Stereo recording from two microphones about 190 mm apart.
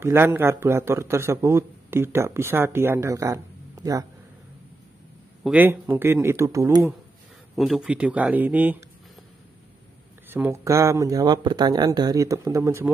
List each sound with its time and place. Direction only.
0.0 s a man's voice: 10° right (ahead or behind)
5.4 s a man's voice: 10° right (ahead or behind)
7.5 s a man's voice: centre (ahead or behind)
10.2 s a man's voice: 10° right (ahead or behind)